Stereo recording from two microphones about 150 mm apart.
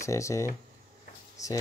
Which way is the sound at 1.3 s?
20° left (ahead or behind).